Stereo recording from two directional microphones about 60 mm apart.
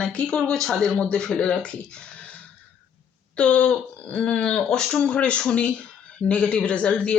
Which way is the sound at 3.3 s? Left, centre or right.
Centre.